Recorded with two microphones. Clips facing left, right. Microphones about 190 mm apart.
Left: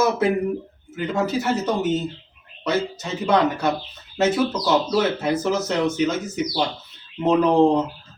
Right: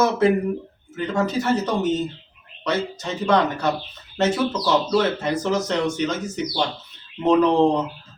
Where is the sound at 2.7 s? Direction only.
5° left (ahead or behind).